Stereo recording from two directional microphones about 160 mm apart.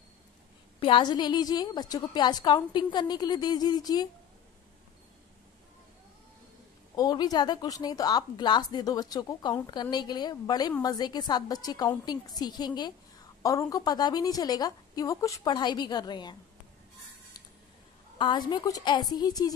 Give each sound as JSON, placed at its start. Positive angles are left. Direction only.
{"t": 0.7, "sound": "a woman's voice", "side_deg": 30}
{"t": 7.0, "sound": "a woman's voice", "side_deg": 25}
{"t": 18.1, "sound": "a woman's voice", "side_deg": 30}